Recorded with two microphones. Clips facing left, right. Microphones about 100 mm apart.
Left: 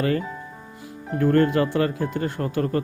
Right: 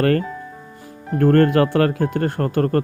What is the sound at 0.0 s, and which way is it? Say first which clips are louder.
Speech: right 5 dB; 60° right (ahead or behind).